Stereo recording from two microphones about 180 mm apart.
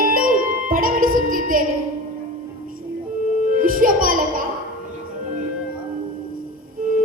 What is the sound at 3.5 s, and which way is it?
Music, 50° right (ahead or behind).